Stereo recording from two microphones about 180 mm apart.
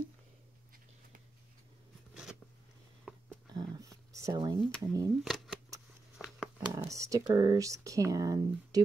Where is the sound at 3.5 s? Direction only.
20° right (ahead or behind).